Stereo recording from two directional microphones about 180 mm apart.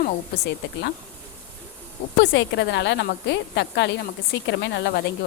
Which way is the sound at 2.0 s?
80° left.